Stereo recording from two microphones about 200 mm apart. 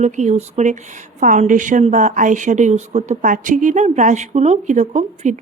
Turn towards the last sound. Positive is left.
turn(degrees=-35)  # may be behind; listen again after turning